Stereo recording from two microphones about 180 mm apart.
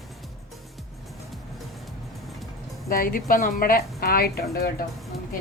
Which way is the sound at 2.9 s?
50° left (ahead or behind).